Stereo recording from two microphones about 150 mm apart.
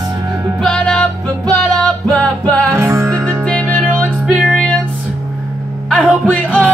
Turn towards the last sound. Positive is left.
turn(degrees=10)  # may be behind; listen again after turning